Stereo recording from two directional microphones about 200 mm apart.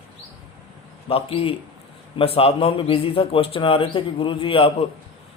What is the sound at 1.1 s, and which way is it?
A man's voice, 30° left (ahead or behind).